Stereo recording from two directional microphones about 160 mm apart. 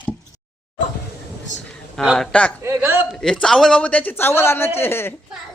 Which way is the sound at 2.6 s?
15° right (ahead or behind).